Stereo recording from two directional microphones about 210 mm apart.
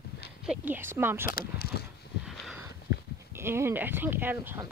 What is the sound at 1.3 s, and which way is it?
Speech, 50° left (ahead or behind).